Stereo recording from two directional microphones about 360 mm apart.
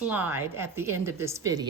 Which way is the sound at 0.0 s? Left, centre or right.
Centre.